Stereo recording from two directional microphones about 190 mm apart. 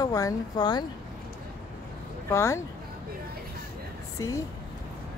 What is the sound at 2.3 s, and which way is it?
Speech, 15° left (ahead or behind).